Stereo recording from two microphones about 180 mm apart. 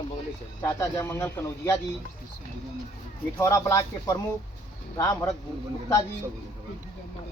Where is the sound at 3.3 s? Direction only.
15° left (ahead or behind).